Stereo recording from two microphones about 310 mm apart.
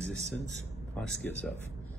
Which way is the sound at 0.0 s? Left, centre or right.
Centre.